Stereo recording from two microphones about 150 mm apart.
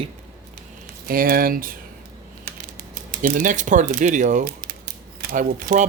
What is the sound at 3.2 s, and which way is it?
Speech, 60° right (ahead or behind).